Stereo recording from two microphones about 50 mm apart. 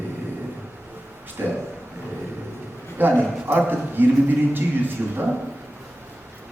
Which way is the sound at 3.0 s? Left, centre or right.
Right.